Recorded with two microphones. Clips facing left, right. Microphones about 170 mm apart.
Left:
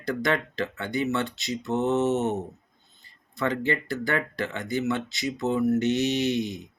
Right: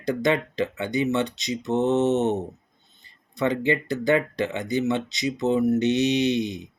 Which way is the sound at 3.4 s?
15° right (ahead or behind).